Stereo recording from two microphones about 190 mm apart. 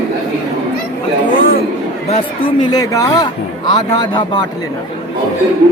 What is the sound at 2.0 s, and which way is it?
Speech, 30° left (ahead or behind).